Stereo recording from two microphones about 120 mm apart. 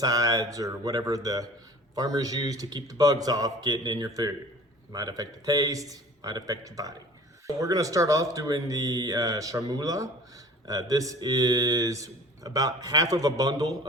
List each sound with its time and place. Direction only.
0.0 s speech: 30° right (ahead or behind)